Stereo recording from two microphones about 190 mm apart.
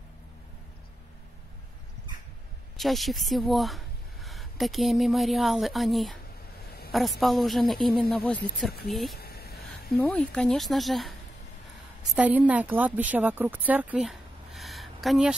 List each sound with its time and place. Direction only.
2.8 s a woman's voice: centre (ahead or behind)
9.2 s a sound: 55° left (ahead or behind)
9.9 s speech: 5° left (ahead or behind)
12.2 s a woman's voice: 10° right (ahead or behind)